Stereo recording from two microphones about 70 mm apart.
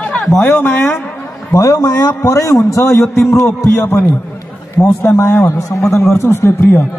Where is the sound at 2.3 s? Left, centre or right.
Left.